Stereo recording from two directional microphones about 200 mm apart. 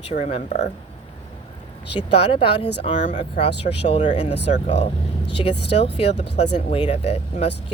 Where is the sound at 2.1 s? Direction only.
25° left (ahead or behind).